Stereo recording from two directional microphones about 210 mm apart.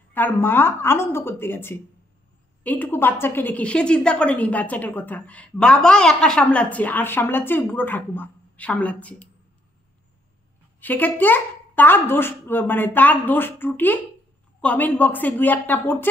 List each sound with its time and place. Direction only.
0.1 s a woman's voice: 10° left (ahead or behind)
10.8 s a woman's voice: 10° left (ahead or behind)